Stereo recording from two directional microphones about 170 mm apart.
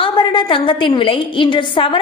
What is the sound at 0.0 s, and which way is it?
A woman's voice, 30° left (ahead or behind).